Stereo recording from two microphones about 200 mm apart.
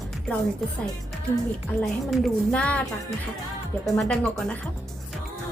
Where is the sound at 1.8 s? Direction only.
Centre (ahead or behind).